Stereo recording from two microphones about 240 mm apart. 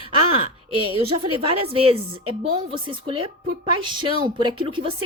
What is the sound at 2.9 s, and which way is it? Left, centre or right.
Speech, right.